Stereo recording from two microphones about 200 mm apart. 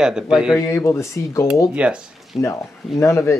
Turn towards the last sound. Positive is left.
turn(degrees=15)  # may be behind; listen again after turning